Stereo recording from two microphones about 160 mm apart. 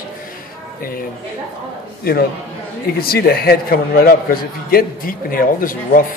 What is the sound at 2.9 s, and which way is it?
A man's voice, 75° left (ahead or behind).